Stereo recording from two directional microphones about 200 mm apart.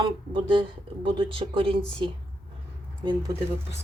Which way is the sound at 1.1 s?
25° right (ahead or behind).